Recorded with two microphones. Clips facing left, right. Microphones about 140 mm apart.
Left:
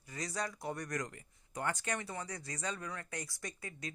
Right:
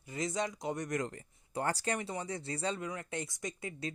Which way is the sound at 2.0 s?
25° right (ahead or behind).